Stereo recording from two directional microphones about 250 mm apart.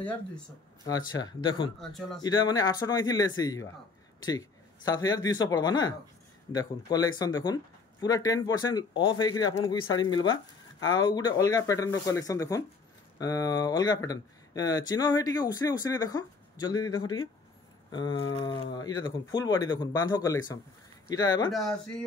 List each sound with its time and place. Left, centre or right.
0.8 s speech: centre
1.8 s speech: centre
2.2 s speech: centre
21.5 s speech: centre